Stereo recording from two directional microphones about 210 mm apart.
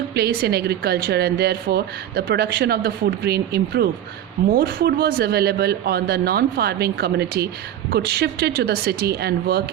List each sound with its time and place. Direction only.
0.1 s speech: 50° right (ahead or behind)